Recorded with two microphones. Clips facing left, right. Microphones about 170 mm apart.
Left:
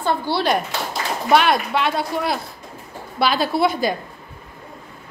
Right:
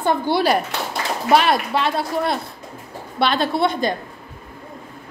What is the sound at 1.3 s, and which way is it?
Speech, centre (ahead or behind).